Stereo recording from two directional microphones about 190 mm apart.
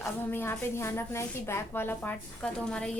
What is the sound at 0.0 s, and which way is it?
A woman's voice, 10° left (ahead or behind).